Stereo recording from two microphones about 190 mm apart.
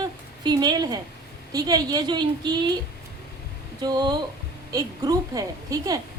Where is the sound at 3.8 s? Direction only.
20° right (ahead or behind).